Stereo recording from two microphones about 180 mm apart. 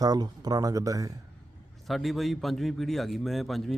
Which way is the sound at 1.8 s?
Centre (ahead or behind).